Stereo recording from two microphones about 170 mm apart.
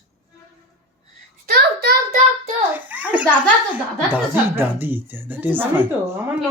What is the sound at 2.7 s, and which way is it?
A child's voice, 10° right (ahead or behind).